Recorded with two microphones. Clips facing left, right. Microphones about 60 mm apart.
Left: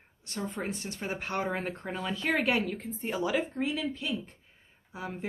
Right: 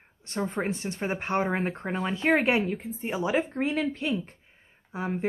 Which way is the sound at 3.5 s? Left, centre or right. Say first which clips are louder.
Right 4 dB; right.